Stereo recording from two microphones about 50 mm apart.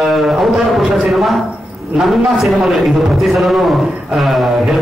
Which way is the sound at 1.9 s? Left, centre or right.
Centre.